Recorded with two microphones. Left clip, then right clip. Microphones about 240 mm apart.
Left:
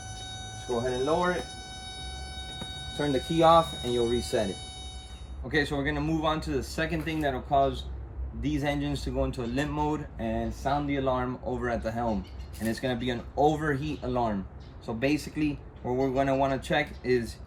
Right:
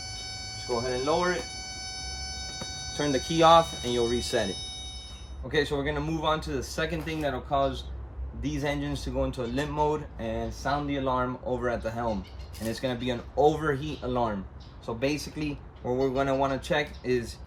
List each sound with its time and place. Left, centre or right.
0.7 s speech: centre
2.8 s speech: centre
5.5 s speech: centre